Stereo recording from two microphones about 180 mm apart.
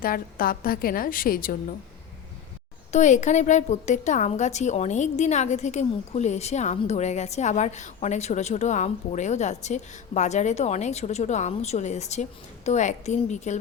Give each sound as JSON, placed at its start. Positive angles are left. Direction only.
{"t": 0.0, "sound": "a woman's voice", "side_deg": 50}
{"t": 2.9, "sound": "a woman's voice", "side_deg": 40}